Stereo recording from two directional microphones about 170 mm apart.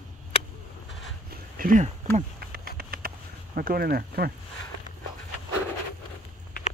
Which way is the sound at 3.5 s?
65° right (ahead or behind).